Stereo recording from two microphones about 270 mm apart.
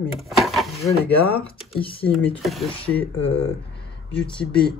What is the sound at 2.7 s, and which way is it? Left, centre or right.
Speech, left.